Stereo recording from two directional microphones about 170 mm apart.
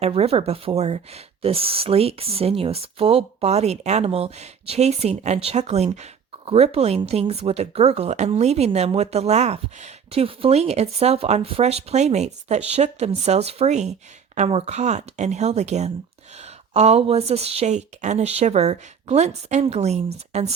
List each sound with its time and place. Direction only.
0.0 s speech: 35° right (ahead or behind)